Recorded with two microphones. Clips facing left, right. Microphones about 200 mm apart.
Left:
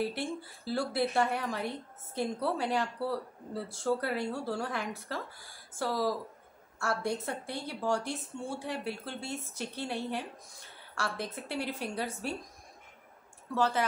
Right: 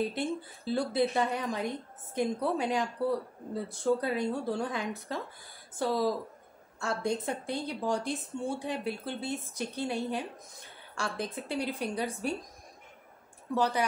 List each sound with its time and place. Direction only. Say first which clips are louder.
0.0 s a woman's voice: right 2 dB; 20° right (ahead or behind)
13.6 s speech: right 1 dB; 15° right (ahead or behind)